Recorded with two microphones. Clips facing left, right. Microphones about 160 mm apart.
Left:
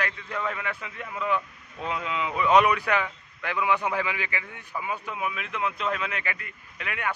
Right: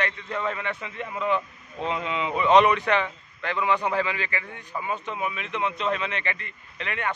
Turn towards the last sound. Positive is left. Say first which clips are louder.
# right 2 dB
turn(degrees=5)  # may be behind; listen again after turning